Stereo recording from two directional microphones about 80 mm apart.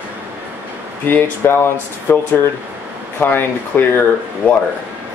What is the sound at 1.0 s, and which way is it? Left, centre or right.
Speech, left.